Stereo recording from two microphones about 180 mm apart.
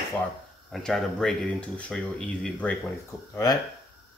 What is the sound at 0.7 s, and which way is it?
Speech, centre (ahead or behind).